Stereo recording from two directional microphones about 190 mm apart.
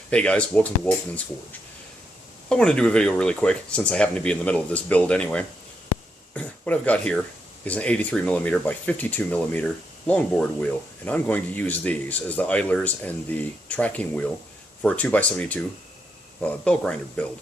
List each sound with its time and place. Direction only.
0.1 s speech: 5° left (ahead or behind)
2.5 s speech: 5° left (ahead or behind)